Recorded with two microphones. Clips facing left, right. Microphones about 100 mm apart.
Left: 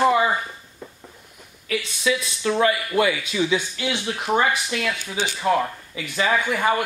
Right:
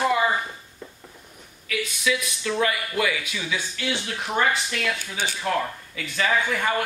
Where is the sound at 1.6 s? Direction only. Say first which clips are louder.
Left 2 dB; 30° left (ahead or behind).